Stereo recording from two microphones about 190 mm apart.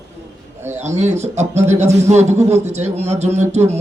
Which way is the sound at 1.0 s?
35° right (ahead or behind).